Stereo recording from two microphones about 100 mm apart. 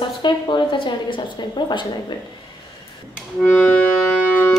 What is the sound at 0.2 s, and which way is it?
A woman's voice, 50° left (ahead or behind).